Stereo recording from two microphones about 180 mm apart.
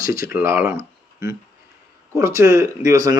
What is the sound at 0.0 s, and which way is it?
Speech, 20° right (ahead or behind).